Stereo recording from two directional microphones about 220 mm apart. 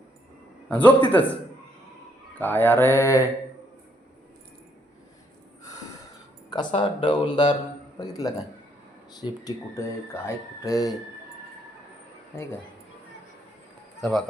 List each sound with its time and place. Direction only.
0.7 s speech: 5° left (ahead or behind)
2.4 s speech: 10° left (ahead or behind)
6.5 s speech: 20° left (ahead or behind)
14.0 s speech: centre (ahead or behind)